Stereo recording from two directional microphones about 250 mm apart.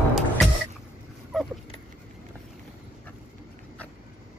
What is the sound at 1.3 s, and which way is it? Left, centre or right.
Dog, centre.